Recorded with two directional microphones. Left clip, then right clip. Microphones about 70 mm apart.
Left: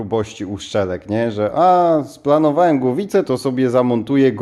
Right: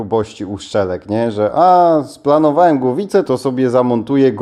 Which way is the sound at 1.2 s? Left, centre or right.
Right.